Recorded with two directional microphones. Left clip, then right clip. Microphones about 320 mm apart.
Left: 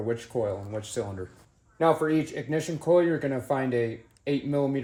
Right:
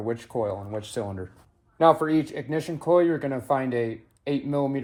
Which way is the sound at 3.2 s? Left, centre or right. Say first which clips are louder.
Right 2 dB; centre.